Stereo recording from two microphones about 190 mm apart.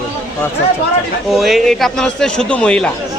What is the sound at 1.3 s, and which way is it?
A man's voice, centre (ahead or behind).